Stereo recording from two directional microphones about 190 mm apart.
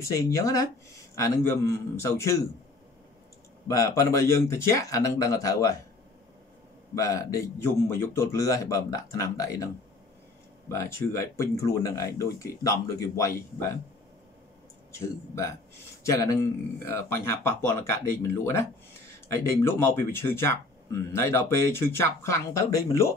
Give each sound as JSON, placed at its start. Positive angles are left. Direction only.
{"t": 0.0, "sound": "speech", "side_deg": 15}
{"t": 3.6, "sound": "speech", "side_deg": 15}
{"t": 7.0, "sound": "speech", "side_deg": 15}
{"t": 10.8, "sound": "speech", "side_deg": 15}
{"t": 15.0, "sound": "speech", "side_deg": 15}
{"t": 19.2, "sound": "speech", "side_deg": 10}